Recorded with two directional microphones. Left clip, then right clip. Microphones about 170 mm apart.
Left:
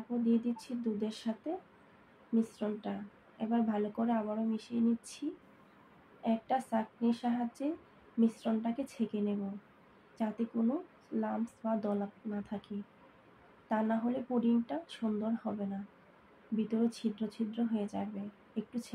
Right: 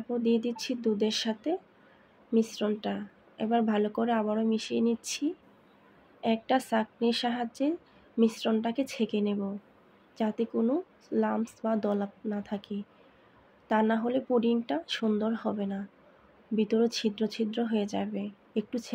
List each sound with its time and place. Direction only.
0.2 s speech: 55° right (ahead or behind)
6.2 s speech: 60° right (ahead or behind)
16.5 s speech: 50° right (ahead or behind)